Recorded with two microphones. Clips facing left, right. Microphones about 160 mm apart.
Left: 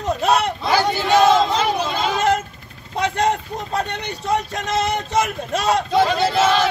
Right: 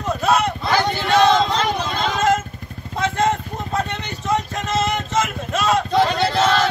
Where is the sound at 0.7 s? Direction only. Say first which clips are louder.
Left 1 dB; 5° left (ahead or behind).